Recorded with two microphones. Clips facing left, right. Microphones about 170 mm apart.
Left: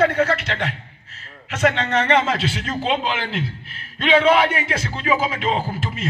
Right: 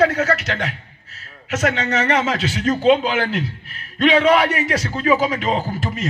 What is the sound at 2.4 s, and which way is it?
A man's voice, 45° right (ahead or behind).